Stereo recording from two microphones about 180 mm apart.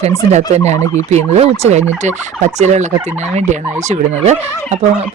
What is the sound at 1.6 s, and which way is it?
Speech, 40° right (ahead or behind).